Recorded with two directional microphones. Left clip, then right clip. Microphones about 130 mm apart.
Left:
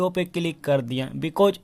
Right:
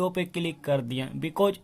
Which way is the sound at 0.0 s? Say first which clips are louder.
Left 4 dB; 20° left (ahead or behind).